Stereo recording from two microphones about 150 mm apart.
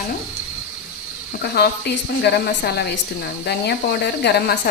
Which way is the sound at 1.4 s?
90° left.